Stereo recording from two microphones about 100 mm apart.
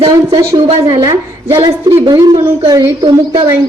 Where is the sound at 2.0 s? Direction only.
45° right (ahead or behind).